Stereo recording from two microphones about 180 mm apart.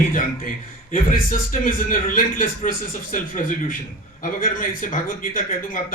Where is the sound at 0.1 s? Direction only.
50° left (ahead or behind).